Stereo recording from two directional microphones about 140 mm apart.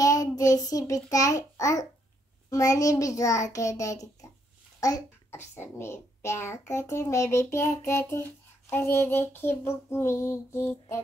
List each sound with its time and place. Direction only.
0.0 s a child's voice: 25° left (ahead or behind)